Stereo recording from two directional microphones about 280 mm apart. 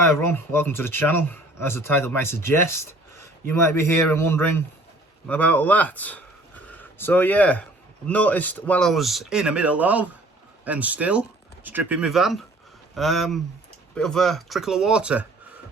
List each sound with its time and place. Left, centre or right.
0.0 s speech: centre